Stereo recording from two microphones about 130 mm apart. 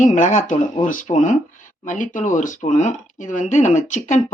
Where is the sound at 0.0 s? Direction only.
70° left (ahead or behind).